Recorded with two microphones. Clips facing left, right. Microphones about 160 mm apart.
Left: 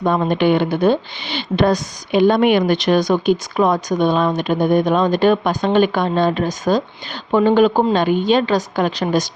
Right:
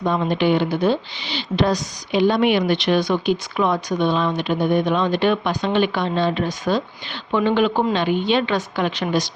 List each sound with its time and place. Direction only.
0.0 s speech: 50° left (ahead or behind)